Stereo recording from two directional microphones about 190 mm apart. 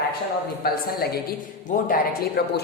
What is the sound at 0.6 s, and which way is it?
A man's voice, 50° left (ahead or behind).